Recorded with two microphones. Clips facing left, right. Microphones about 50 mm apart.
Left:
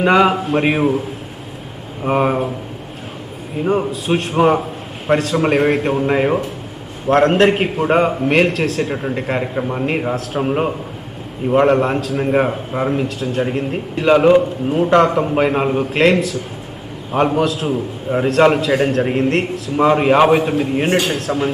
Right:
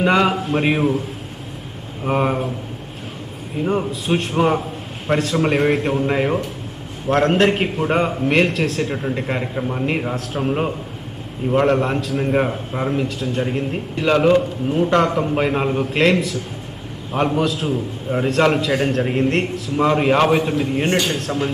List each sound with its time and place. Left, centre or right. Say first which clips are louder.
0.0 s a man's voice: left 3 dB; centre
2.0 s a man's voice: left 3 dB; centre
3.5 s a man's voice: left 3 dB; centre